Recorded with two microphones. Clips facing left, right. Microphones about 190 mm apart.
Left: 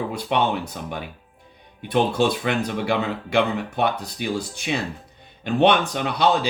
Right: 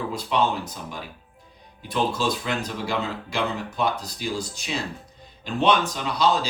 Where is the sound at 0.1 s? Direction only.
60° left (ahead or behind).